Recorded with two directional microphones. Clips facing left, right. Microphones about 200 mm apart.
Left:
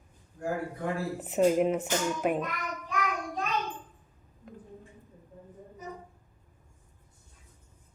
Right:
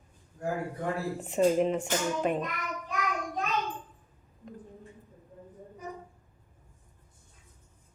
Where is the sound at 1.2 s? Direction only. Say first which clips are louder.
Left 1 dB; 5° left (ahead or behind).